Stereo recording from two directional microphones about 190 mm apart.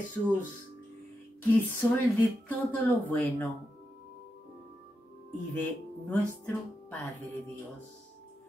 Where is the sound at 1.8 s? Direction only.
15° left (ahead or behind).